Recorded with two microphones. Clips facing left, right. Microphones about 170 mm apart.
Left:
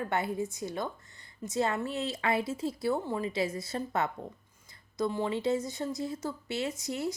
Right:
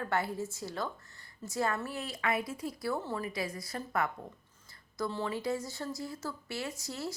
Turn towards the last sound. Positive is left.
turn(degrees=20)  # may be behind; listen again after turning